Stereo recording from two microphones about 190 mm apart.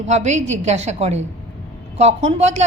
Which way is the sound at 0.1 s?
35° right (ahead or behind).